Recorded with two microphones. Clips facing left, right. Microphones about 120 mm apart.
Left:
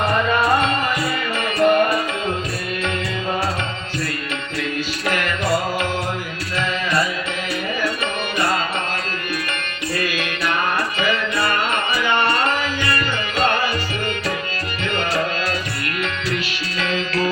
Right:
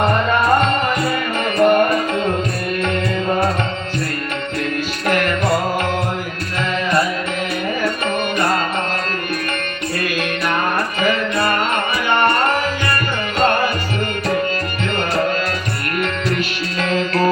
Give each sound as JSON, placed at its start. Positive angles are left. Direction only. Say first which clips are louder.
{"t": 1.5, "sound": "music", "louder": "right 2 dB", "side_deg": -55}
{"t": 5.0, "sound": "music", "louder": "right 5 dB", "side_deg": -50}
{"t": 11.0, "sound": "music", "louder": "right 4 dB", "side_deg": -50}
{"t": 12.0, "sound": "tabla", "louder": "right 4 dB", "side_deg": -55}
{"t": 13.4, "sound": "music", "louder": "right 4 dB", "side_deg": -45}
{"t": 16.8, "sound": "music", "louder": "right 4 dB", "side_deg": -50}